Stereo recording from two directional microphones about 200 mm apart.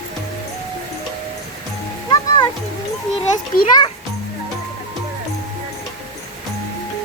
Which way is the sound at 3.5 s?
45° left (ahead or behind).